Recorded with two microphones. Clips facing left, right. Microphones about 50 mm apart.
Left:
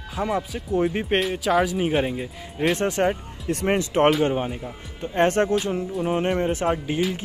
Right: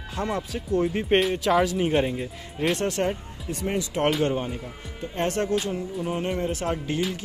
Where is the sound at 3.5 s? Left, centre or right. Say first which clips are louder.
Left 6 dB; left.